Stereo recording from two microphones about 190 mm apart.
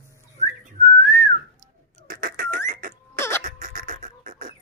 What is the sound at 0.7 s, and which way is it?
Whistling, 50° right (ahead or behind).